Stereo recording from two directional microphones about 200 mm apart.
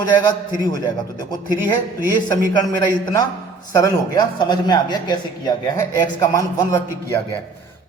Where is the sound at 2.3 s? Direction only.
20° left (ahead or behind).